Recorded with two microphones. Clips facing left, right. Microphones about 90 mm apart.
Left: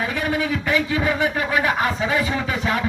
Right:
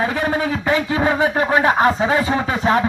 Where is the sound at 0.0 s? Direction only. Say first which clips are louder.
Right 4 dB; 35° right (ahead or behind).